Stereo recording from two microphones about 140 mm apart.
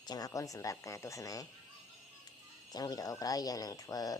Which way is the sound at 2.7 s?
25° left (ahead or behind).